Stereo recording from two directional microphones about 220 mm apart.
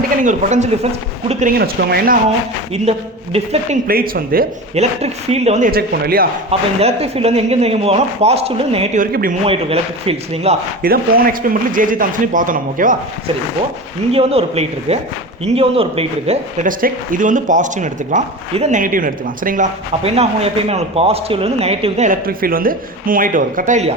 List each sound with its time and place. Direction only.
0.2 s speech: 35° right (ahead or behind)
1.5 s speech: 45° right (ahead or behind)
2.9 s speech: 30° right (ahead or behind)
3.8 s speech: 40° right (ahead or behind)
4.7 s speech: 30° right (ahead or behind)
6.5 s speech: 30° right (ahead or behind)
9.5 s speech: 25° right (ahead or behind)
10.8 s speech: 40° right (ahead or behind)
14.1 s speech: 25° right (ahead or behind)